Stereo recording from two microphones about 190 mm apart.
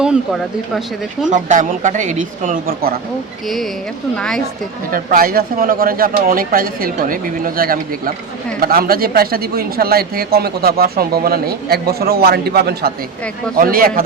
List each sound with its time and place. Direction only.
1.3 s a man's voice: 40° right (ahead or behind)
4.9 s a man's voice: 50° right (ahead or behind)